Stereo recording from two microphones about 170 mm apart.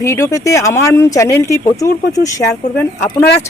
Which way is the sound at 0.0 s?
20° left (ahead or behind).